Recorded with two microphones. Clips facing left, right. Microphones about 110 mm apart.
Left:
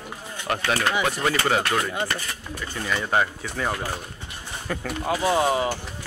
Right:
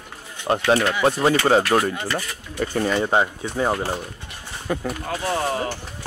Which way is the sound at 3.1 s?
25° right (ahead or behind).